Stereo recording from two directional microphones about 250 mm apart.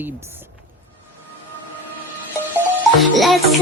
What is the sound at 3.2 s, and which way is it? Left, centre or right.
Music, centre.